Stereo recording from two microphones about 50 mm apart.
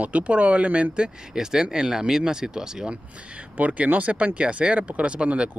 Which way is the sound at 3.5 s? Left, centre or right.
Right.